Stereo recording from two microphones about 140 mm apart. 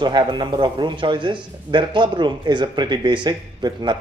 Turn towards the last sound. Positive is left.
turn(degrees=-30)  # may be behind; listen again after turning